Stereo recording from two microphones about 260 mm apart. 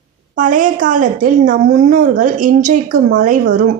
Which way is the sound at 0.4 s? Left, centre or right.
Right.